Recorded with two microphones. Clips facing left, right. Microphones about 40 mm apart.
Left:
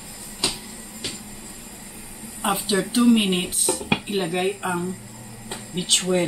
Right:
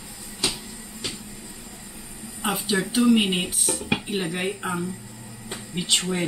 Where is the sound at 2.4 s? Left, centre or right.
Centre.